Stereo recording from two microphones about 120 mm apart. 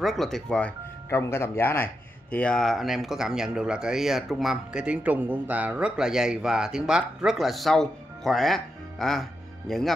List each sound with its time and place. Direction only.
0.0 s speech: centre (ahead or behind)
1.1 s a man's voice: 20° left (ahead or behind)
2.3 s speech: 5° left (ahead or behind)